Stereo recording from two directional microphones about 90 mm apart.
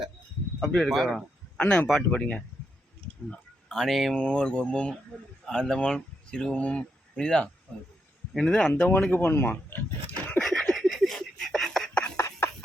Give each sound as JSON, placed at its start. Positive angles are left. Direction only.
{"t": 0.6, "sound": "speech", "side_deg": 5}
{"t": 1.5, "sound": "speech", "side_deg": 10}
{"t": 3.2, "sound": "speech", "side_deg": 5}
{"t": 4.2, "sound": "speech", "side_deg": 10}
{"t": 8.9, "sound": "speech", "side_deg": 20}
{"t": 10.4, "sound": "a sound", "side_deg": 0}
{"t": 12.1, "sound": "a sound", "side_deg": 35}